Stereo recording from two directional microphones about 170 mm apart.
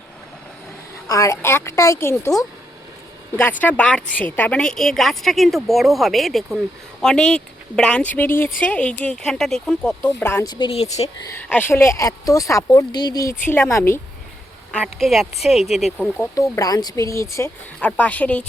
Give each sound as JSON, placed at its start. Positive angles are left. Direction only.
{"t": 1.0, "sound": "speech", "side_deg": 20}
{"t": 3.6, "sound": "a woman's voice", "side_deg": 10}
{"t": 10.2, "sound": "speech", "side_deg": 20}
{"t": 11.4, "sound": "speech", "side_deg": 10}
{"t": 14.7, "sound": "a woman's voice", "side_deg": 0}
{"t": 16.1, "sound": "speech", "side_deg": 20}